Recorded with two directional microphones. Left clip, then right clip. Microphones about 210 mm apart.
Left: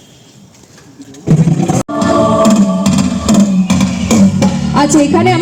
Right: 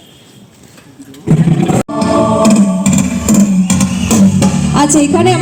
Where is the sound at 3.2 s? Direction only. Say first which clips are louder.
Even; 40° right (ahead or behind).